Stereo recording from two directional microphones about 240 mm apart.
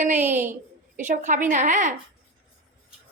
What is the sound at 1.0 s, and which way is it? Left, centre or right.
Speech, right.